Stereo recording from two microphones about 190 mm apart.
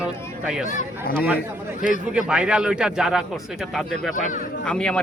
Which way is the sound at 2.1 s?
5° right (ahead or behind).